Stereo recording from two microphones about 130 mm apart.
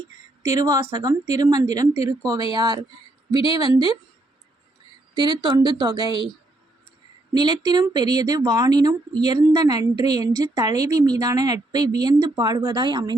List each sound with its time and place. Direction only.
0.4 s a woman's voice: 25° right (ahead or behind)
5.1 s speech: 35° right (ahead or behind)
7.3 s a woman's voice: 30° right (ahead or behind)